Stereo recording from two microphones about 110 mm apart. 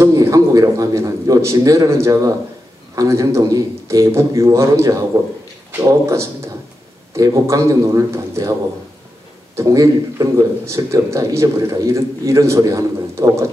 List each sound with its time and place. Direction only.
0.0 s a man's voice: 30° right (ahead or behind)
9.6 s speech: 30° right (ahead or behind)